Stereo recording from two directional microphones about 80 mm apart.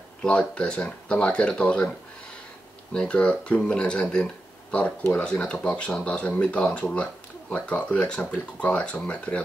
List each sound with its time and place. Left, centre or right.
0.2 s speech: centre
2.9 s speech: centre